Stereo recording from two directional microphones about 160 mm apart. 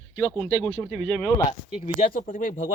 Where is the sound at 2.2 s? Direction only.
60° left (ahead or behind).